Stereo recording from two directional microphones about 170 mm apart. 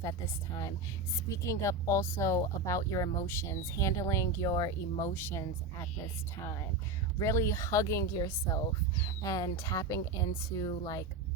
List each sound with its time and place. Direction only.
0.0 s speech: 20° left (ahead or behind)